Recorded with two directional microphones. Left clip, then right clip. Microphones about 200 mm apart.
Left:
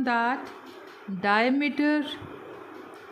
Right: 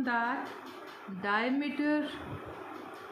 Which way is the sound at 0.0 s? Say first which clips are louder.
Left 6 dB; 45° left (ahead or behind).